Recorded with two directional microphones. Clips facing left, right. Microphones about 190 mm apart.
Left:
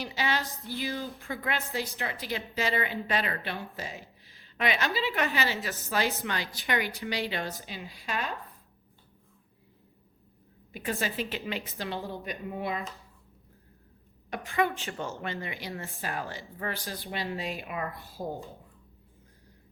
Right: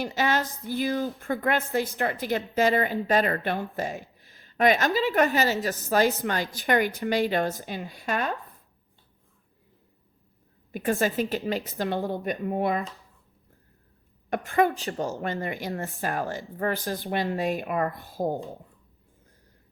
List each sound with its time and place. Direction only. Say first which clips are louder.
0.0 s a sound: right 6 dB; 45° right (ahead or behind)
0.4 s a sound: right 3 dB; centre (ahead or behind)
0.7 s a woman's voice: right 8 dB; 50° right (ahead or behind)
10.7 s a woman's voice: right 7 dB; 50° right (ahead or behind)
14.3 s a woman's voice: right 6 dB; 55° right (ahead or behind)
14.7 s a woman's voice: right 6 dB; 35° right (ahead or behind)
15.2 s a woman's voice: right 6 dB; 45° right (ahead or behind)